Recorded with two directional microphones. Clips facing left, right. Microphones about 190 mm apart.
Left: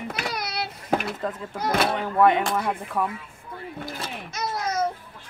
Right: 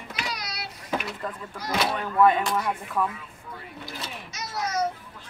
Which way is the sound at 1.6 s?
55° left (ahead or behind).